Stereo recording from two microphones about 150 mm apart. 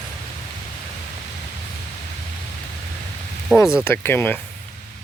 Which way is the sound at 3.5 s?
10° left (ahead or behind).